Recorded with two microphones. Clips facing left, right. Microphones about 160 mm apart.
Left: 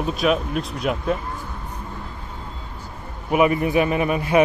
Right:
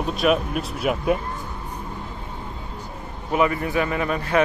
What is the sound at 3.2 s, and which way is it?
Speech, 15° left (ahead or behind).